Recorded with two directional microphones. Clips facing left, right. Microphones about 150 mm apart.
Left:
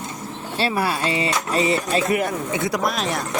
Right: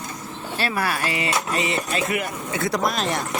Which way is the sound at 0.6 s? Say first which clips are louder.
Left 3 dB; 25° left (ahead or behind).